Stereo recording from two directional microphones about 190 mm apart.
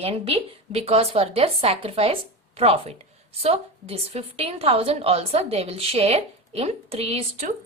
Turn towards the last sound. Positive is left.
turn(degrees=-30)  # may be behind; listen again after turning